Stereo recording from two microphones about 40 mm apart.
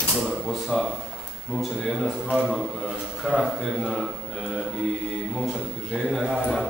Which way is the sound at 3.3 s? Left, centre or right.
Centre.